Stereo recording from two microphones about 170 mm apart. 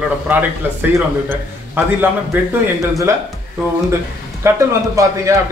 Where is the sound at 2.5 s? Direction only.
15° right (ahead or behind).